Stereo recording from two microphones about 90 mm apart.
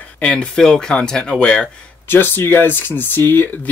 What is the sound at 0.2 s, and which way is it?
Speech, 10° left (ahead or behind).